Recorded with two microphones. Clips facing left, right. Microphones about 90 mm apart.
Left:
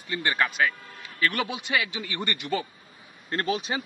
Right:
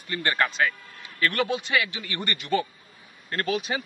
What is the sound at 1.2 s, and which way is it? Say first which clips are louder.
Speech: right 2 dB; 15° left (ahead or behind).